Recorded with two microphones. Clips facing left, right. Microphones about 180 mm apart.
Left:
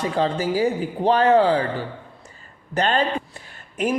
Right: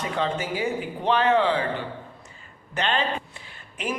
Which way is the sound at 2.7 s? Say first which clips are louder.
Left 5 dB; 40° left (ahead or behind).